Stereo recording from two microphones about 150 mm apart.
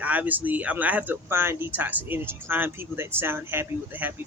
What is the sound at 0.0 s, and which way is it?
Speech, 10° right (ahead or behind).